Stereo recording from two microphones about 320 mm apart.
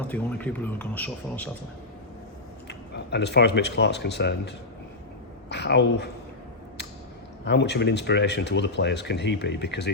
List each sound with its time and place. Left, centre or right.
0.1 s speech: centre
2.6 s speech: left
7.4 s speech: left